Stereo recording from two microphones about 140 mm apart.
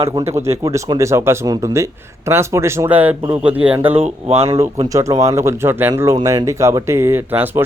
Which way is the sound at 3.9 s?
45° right (ahead or behind).